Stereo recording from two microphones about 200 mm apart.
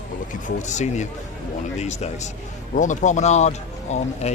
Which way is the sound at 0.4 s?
35° left (ahead or behind).